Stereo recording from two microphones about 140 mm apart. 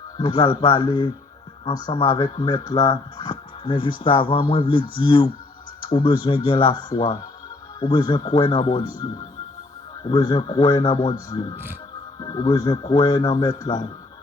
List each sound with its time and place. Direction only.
0.2 s speech: 30° left (ahead or behind)
10.1 s a man's voice: 30° left (ahead or behind)